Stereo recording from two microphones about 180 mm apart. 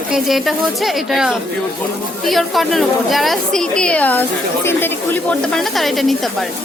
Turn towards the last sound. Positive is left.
turn(degrees=0)  # may be behind; listen again after turning